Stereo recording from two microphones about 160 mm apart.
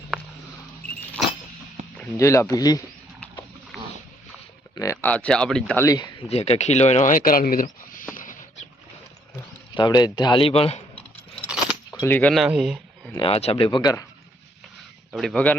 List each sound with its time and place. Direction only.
2.1 s speech: 20° left (ahead or behind)
3.7 s a sound: centre (ahead or behind)
4.7 s speech: 20° left (ahead or behind)
5.8 s speech: 25° left (ahead or behind)
6.2 s speech: 40° left (ahead or behind); by 8.0 s 60° left (ahead or behind)
8.1 s a sound: 55° left (ahead or behind)
9.7 s speech: 25° left (ahead or behind)
11.9 s speech: 15° left (ahead or behind)
12.3 s speech: 5° right (ahead or behind)
13.1 s speech: 35° left (ahead or behind)
13.7 s speech: 25° left (ahead or behind)
15.1 s speech: centre (ahead or behind)